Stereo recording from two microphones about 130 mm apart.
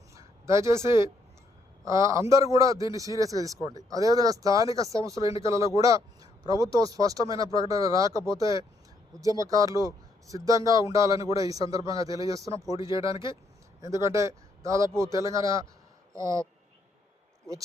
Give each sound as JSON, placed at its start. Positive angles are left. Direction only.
{"t": 0.1, "sound": "a woman's voice", "side_deg": -25}